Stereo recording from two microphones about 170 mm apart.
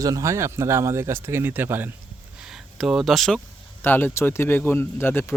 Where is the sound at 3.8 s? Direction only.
10° left (ahead or behind).